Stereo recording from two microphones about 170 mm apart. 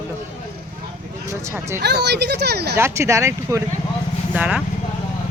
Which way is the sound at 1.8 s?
85° right.